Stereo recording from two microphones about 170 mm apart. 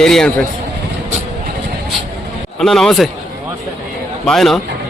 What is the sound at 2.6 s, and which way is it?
Speech, centre (ahead or behind).